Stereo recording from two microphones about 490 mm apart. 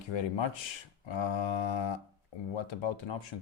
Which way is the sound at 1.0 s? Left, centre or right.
Left.